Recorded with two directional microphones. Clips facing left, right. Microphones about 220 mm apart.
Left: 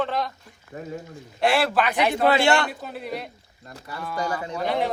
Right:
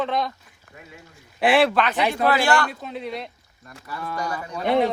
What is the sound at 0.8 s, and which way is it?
Speech, 40° left (ahead or behind).